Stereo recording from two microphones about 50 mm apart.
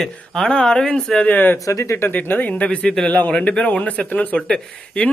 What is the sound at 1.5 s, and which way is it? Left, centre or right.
Speech, left.